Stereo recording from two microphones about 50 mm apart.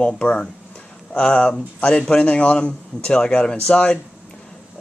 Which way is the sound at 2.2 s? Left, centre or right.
Left.